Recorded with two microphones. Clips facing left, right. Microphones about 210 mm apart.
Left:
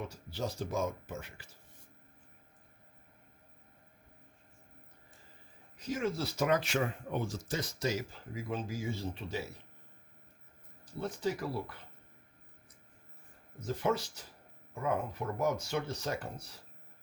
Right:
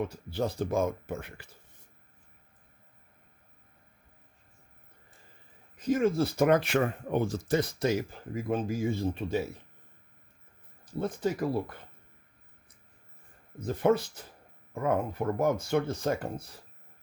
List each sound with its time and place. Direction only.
0.0 s speech: 60° right (ahead or behind)
5.7 s speech: 50° right (ahead or behind)
11.2 s speech: 50° right (ahead or behind)
13.7 s speech: 55° right (ahead or behind)